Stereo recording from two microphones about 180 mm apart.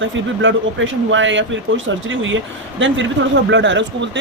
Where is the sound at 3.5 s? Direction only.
90° right.